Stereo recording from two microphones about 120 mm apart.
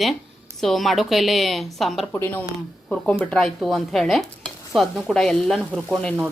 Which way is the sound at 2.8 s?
5° left (ahead or behind).